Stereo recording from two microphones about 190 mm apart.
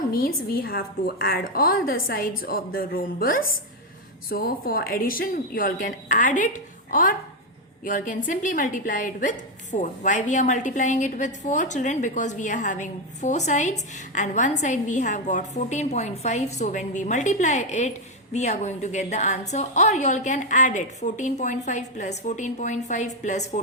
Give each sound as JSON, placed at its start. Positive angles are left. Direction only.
{"t": 0.1, "sound": "a woman's voice", "side_deg": 50}